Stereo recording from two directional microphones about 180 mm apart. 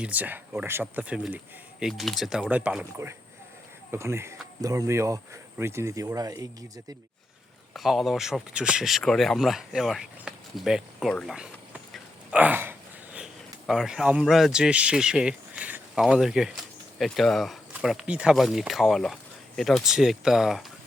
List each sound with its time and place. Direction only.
0.0 s speech: 10° right (ahead or behind)
7.7 s speech: centre (ahead or behind)